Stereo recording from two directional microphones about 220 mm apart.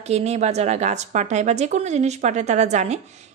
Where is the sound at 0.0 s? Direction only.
30° right (ahead or behind).